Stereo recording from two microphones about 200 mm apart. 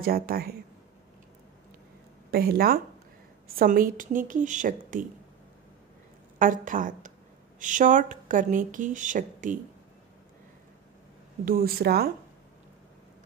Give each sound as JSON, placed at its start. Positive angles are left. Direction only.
{"t": 0.0, "sound": "a woman's voice", "side_deg": -50}
{"t": 2.3, "sound": "a woman's voice", "side_deg": -50}
{"t": 6.4, "sound": "speech", "side_deg": -40}
{"t": 11.4, "sound": "a woman's voice", "side_deg": -45}